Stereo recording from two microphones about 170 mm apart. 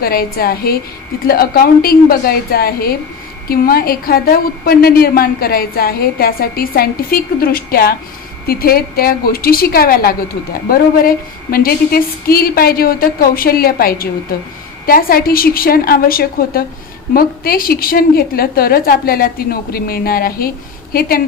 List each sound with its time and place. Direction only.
0.0 s a woman's voice: 60° left (ahead or behind)